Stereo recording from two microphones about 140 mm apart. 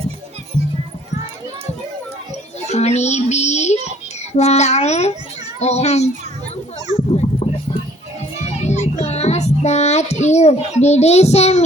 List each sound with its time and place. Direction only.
2.6 s speech: 50° left (ahead or behind)
7.4 s clip-clop: 50° left (ahead or behind)
8.4 s child singing: 55° left (ahead or behind)